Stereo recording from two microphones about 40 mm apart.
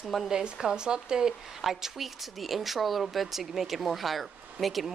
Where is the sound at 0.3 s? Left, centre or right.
Centre.